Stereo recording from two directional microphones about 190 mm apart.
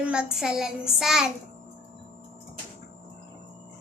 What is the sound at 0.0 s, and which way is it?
A child's voice, 5° right (ahead or behind).